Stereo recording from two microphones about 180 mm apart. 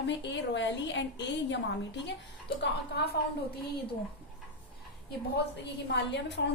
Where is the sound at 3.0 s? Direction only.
65° left (ahead or behind).